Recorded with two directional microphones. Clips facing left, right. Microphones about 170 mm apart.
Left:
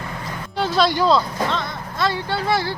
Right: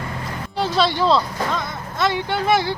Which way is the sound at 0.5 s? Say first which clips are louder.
Left 1 dB; centre (ahead or behind).